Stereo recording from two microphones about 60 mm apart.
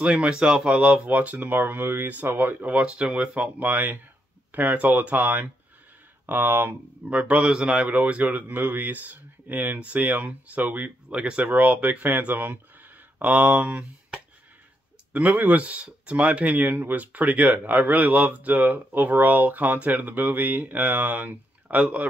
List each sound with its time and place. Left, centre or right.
0.0 s speech: right
7.4 s speech: centre